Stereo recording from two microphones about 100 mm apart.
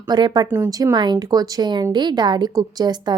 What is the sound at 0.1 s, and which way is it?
Speech, 45° right (ahead or behind).